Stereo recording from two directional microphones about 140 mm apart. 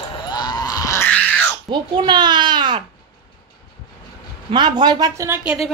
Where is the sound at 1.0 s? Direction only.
10° left (ahead or behind).